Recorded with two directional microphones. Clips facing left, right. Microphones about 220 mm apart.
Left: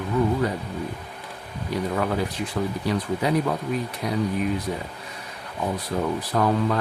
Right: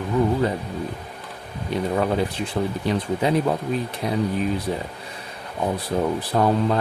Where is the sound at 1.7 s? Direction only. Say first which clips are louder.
Right 3 dB; 25° right (ahead or behind).